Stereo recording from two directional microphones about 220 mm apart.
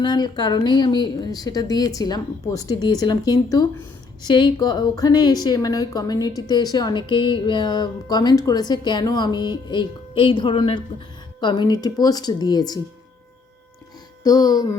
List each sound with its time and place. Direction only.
0.0 s a woman's voice: 20° left (ahead or behind)
14.3 s a woman's voice: 15° left (ahead or behind)